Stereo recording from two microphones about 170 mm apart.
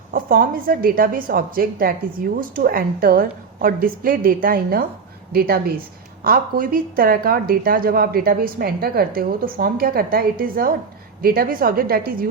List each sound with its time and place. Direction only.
0.1 s a woman's voice: 55° right (ahead or behind)